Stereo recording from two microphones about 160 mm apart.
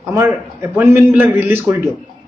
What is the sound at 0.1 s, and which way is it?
A man's voice, 15° right (ahead or behind).